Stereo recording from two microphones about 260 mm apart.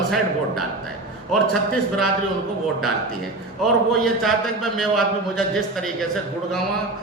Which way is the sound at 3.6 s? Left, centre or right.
Centre.